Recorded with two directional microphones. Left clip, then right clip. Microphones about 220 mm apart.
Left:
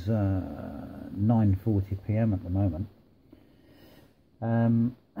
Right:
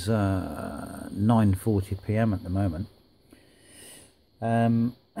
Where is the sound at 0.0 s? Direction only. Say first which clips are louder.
Right 4 dB; 40° right (ahead or behind).